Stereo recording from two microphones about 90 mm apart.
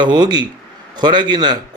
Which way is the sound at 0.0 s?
55° right (ahead or behind).